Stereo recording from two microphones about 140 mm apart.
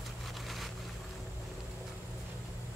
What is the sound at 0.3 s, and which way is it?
Vehicle, centre (ahead or behind).